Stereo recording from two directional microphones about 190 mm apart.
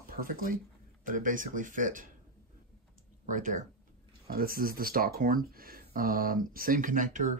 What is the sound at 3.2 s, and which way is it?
Speech, 45° right (ahead or behind).